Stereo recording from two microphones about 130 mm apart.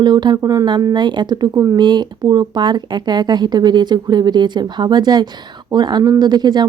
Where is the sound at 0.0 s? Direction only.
35° right (ahead or behind).